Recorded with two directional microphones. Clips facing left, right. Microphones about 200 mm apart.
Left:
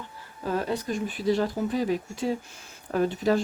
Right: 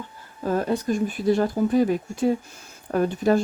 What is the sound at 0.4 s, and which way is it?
Speech, 45° right (ahead or behind).